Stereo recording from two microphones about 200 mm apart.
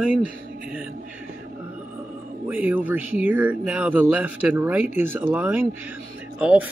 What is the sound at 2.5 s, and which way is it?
Speech, 10° right (ahead or behind).